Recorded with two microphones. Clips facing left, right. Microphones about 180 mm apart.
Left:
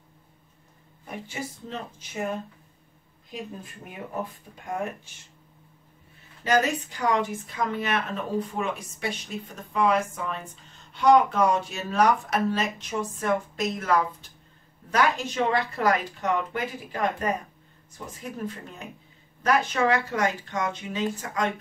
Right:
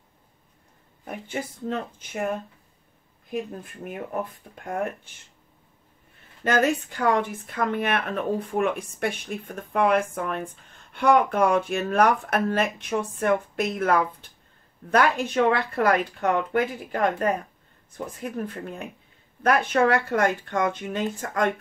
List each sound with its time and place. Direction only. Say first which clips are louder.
1.0 s speech: right 3 dB; 55° right (ahead or behind)
6.4 s speech: right 2 dB; 55° right (ahead or behind)